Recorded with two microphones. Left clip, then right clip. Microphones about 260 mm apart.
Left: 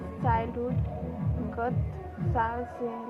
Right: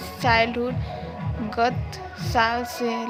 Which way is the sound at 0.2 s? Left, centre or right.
Right.